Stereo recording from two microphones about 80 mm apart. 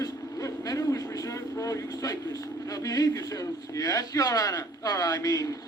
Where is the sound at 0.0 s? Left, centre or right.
Left.